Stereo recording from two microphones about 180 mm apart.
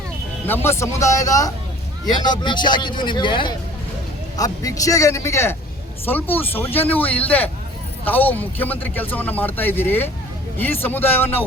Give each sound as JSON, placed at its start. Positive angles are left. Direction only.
{"t": 0.4, "sound": "a man's voice", "side_deg": 10}